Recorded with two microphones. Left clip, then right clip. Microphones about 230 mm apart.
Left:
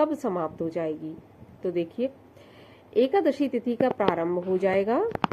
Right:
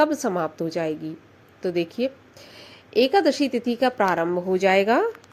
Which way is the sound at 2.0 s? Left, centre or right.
Right.